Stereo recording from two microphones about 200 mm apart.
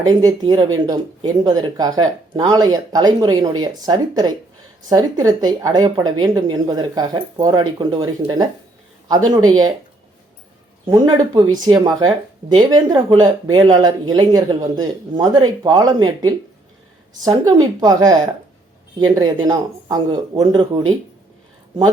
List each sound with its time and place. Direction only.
0.0 s a woman's voice: 20° right (ahead or behind)
10.8 s a woman's voice: 15° right (ahead or behind)